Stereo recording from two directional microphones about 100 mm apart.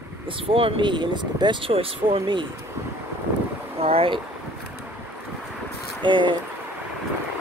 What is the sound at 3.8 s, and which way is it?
Speech, 75° right (ahead or behind).